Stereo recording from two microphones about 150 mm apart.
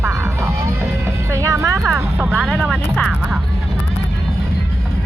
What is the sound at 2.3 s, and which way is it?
Speech, centre (ahead or behind).